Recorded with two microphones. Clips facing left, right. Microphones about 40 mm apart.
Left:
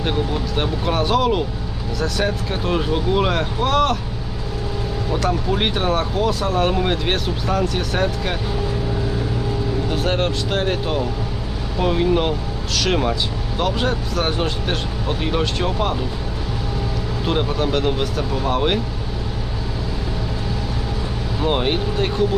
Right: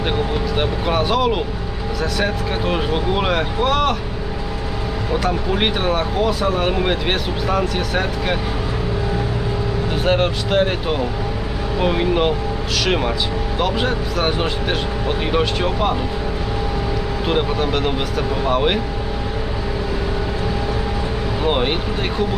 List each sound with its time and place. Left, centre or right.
0.0 s speech: centre
5.1 s speech: centre
9.9 s speech: centre
17.2 s speech: centre
21.4 s speech: centre